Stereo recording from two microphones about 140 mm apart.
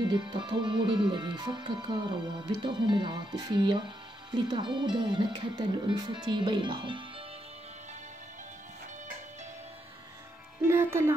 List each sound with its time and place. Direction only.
0.1 s speech: 35° right (ahead or behind)
10.7 s music: 20° right (ahead or behind)